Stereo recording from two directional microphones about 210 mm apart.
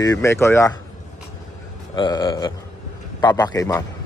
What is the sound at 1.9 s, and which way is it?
Speech, 20° left (ahead or behind).